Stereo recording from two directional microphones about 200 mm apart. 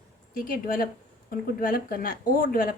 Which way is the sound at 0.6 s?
45° left (ahead or behind).